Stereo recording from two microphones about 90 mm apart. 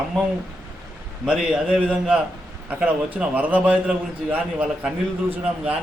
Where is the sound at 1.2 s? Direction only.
10° right (ahead or behind).